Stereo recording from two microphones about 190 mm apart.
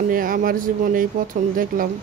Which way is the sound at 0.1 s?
45° right (ahead or behind).